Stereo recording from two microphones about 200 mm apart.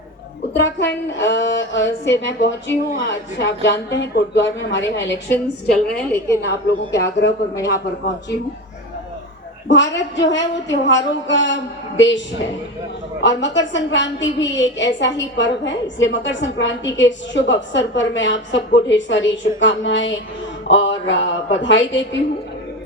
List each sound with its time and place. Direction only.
0.5 s a woman's voice: 60° left (ahead or behind)
5.1 s a woman's voice: 10° left (ahead or behind)
6.4 s a woman's voice: 60° left (ahead or behind)
9.6 s a woman's voice: 65° left (ahead or behind)
13.2 s a woman's voice: 65° left (ahead or behind)